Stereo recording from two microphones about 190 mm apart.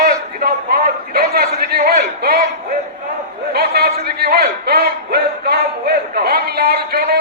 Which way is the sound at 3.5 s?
55° right (ahead or behind).